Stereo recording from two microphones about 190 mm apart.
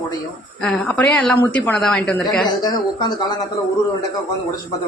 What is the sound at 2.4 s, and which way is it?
Speech, 20° left (ahead or behind).